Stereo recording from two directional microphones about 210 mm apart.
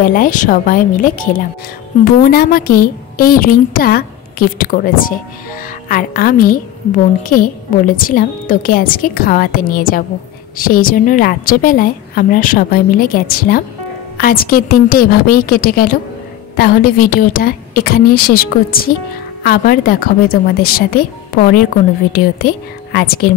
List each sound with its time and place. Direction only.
0.0 s a woman's voice: 45° left (ahead or behind)
22.9 s a woman's voice: 45° left (ahead or behind)